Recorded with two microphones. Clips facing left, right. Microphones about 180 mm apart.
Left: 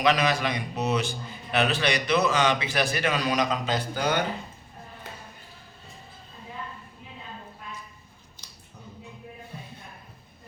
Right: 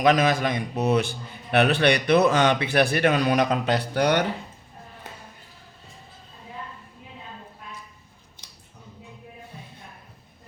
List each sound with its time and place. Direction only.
0.0 s a man's voice: 50° right (ahead or behind); by 4.3 s 70° right (ahead or behind)